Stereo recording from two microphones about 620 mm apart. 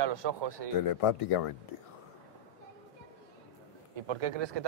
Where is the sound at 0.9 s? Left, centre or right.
Left.